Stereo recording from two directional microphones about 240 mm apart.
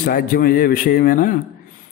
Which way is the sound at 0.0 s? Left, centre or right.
Left.